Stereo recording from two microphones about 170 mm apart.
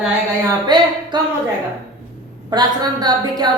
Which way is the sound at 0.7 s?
25° right (ahead or behind).